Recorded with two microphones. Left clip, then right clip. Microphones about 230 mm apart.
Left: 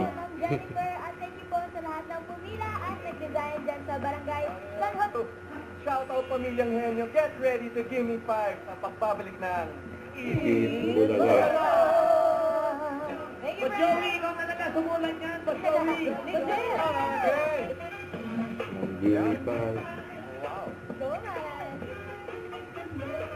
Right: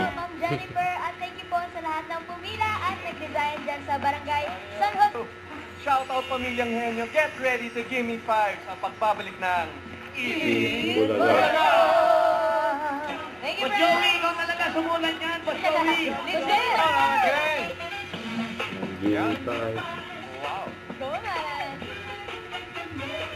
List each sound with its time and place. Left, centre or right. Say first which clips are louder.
0.0 s music: right 4 dB; right
2.6 s children playing: right 8 dB; right
3.3 s speech: right 4 dB; right
10.7 s a capella: right 3 dB; right
10.9 s speech: right 1 dB; centre
19.1 s speech: right 3 dB; right